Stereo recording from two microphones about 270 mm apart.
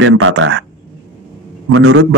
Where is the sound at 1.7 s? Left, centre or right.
Right.